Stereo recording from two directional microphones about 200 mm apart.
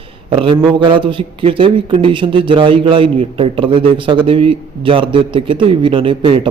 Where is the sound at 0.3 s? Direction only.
25° right (ahead or behind).